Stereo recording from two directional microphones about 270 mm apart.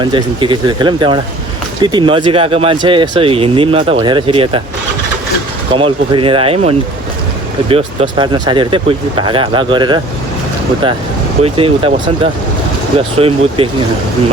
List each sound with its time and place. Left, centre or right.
0.0 s speech: centre
5.7 s speech: centre
11.4 s speech: centre